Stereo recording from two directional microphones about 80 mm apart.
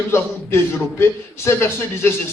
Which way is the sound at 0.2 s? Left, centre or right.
Left.